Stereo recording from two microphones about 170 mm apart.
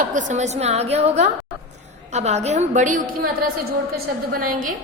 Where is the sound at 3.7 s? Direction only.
60° right (ahead or behind).